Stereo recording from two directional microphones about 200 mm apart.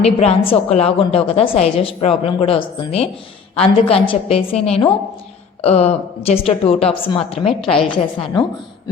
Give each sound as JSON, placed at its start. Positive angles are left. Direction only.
{"t": 0.0, "sound": "a woman's voice", "side_deg": 30}